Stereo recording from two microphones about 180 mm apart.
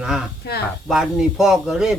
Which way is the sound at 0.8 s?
Centre (ahead or behind).